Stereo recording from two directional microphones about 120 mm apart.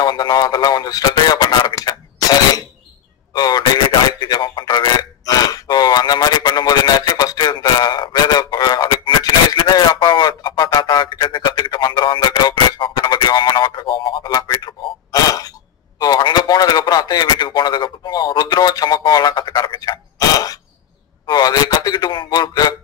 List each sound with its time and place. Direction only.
0.0 s speech: 35° left (ahead or behind)
3.3 s radio: 35° left (ahead or behind)
14.3 s a sound: 35° left (ahead or behind)